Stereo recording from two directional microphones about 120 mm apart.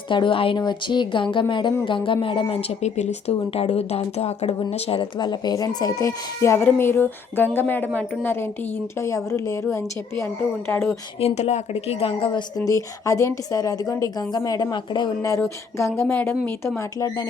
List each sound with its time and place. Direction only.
0.1 s speech: 45° left (ahead or behind); by 4.5 s 65° left (ahead or behind)
4.7 s a woman's voice: 50° left (ahead or behind); by 10.9 s 15° left (ahead or behind)
11.2 s speech: 65° left (ahead or behind); by 12.4 s 50° left (ahead or behind)
12.5 s a woman's voice: 30° left (ahead or behind)
16.0 s a woman's voice: 20° left (ahead or behind)